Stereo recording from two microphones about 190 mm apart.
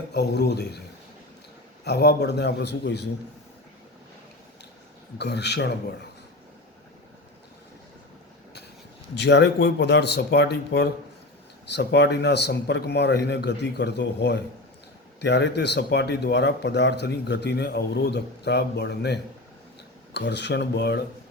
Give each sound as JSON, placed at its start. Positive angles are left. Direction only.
{"t": 0.1, "sound": "speech", "side_deg": 60}
{"t": 1.8, "sound": "speech", "side_deg": 60}
{"t": 5.1, "sound": "speech", "side_deg": 60}
{"t": 9.1, "sound": "speech", "side_deg": 65}